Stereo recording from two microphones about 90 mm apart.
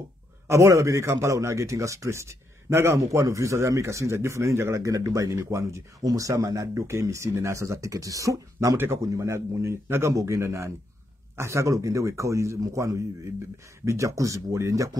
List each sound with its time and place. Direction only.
0.5 s a man's voice: 35° right (ahead or behind)